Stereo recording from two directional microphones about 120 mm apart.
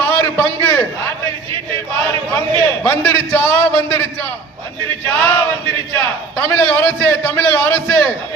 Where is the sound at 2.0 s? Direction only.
15° left (ahead or behind).